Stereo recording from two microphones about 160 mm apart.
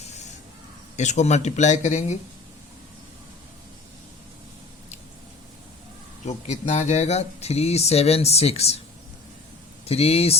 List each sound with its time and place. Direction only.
0.9 s speech: 45° left (ahead or behind)
6.2 s speech: 45° left (ahead or behind)
9.8 s speech: 40° left (ahead or behind)